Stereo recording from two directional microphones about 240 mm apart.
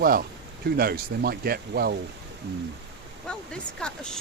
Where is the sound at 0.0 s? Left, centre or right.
Right.